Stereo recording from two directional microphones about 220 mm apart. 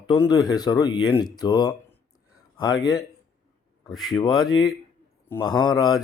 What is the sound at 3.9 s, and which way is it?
Speech, centre (ahead or behind).